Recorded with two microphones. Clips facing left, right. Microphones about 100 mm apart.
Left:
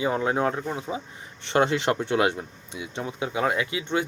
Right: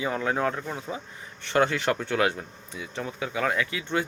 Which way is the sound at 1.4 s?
25° left (ahead or behind).